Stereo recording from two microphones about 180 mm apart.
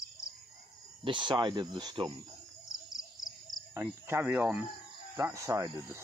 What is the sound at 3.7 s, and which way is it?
Cricket, 15° right (ahead or behind).